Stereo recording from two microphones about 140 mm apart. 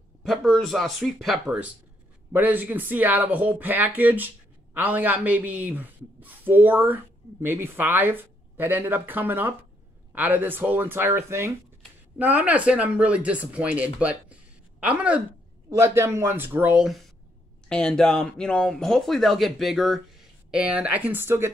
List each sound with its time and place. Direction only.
0.2 s speech: centre (ahead or behind)
15.7 s speech: 20° right (ahead or behind)